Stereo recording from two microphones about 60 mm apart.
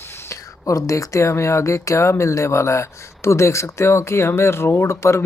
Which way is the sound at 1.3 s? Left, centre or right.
Left.